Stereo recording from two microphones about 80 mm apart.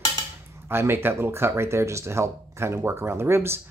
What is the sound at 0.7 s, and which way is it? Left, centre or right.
Speech, right.